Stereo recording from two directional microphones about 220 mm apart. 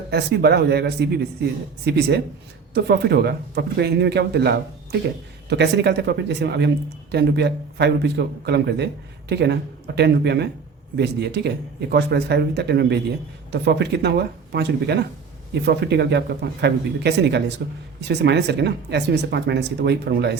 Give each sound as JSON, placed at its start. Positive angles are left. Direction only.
{"t": 0.1, "sound": "speech", "side_deg": -45}